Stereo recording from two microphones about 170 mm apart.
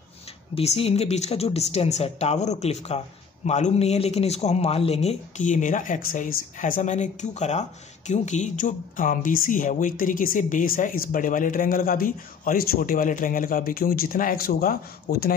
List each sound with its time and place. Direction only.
0.6 s speech: 35° left (ahead or behind); by 15.3 s 60° left (ahead or behind)